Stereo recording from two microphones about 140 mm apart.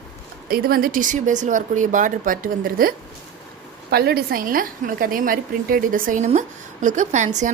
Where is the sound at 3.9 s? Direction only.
90° right.